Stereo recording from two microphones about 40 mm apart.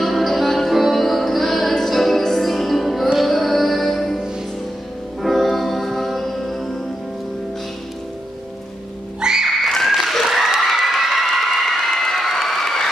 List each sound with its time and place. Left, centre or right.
0.0 s music: centre
5.2 s music: centre
9.2 s music: centre
9.5 s a sound: centre
11.7 s crowd: centre